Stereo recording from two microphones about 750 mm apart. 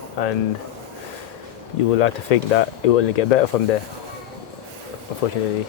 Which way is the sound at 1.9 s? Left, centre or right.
Left.